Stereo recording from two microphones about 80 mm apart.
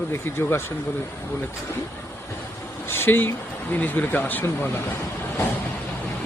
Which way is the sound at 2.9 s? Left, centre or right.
Left.